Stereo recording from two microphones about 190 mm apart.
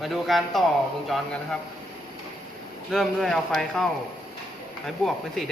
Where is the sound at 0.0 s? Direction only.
Centre (ahead or behind).